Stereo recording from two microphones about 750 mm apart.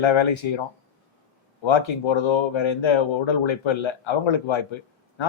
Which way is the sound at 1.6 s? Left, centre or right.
Left.